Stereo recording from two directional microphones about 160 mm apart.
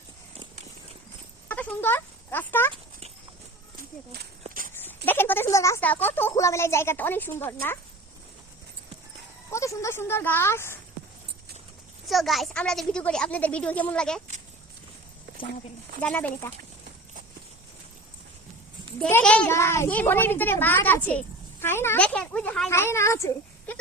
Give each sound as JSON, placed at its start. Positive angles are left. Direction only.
{"t": 1.5, "sound": "speech", "side_deg": 10}
{"t": 4.4, "sound": "a sound", "side_deg": -60}
{"t": 4.7, "sound": "a child's voice", "side_deg": 10}
{"t": 9.5, "sound": "a child's voice", "side_deg": 20}
{"t": 12.0, "sound": "a woman's voice", "side_deg": 0}
{"t": 15.3, "sound": "a sound", "side_deg": -60}
{"t": 16.0, "sound": "a child's voice", "side_deg": 10}
{"t": 18.9, "sound": "a child's voice", "side_deg": 5}
{"t": 22.7, "sound": "a child's voice", "side_deg": 15}